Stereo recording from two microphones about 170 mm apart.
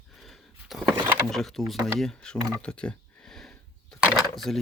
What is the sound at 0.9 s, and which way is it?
Speech, 15° right (ahead or behind).